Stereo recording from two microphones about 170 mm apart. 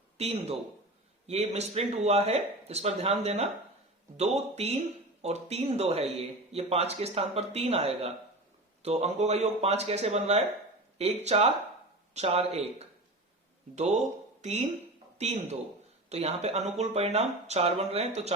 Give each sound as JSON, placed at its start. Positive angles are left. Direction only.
{"t": 0.2, "sound": "speech", "side_deg": -35}